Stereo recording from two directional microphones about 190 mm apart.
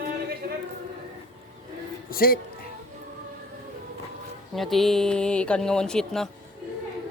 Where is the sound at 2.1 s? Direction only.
50° left (ahead or behind).